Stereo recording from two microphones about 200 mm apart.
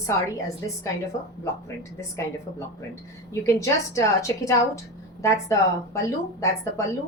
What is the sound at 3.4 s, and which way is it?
Speech, 15° left (ahead or behind).